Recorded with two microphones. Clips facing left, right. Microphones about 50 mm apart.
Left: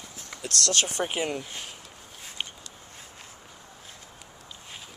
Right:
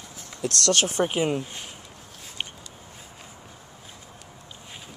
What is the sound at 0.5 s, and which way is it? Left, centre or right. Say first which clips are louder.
Speech: right 4 dB; right.